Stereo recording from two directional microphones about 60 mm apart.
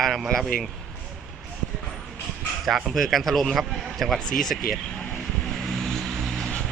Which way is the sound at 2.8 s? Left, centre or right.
Centre.